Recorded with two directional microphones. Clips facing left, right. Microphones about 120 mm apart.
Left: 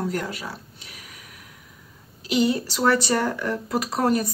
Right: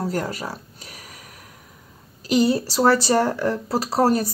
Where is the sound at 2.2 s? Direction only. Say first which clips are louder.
Right 3 dB; 40° right (ahead or behind).